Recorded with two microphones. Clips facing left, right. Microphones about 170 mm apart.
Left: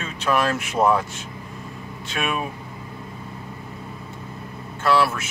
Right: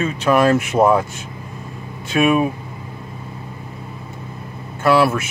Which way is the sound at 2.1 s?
10° right (ahead or behind).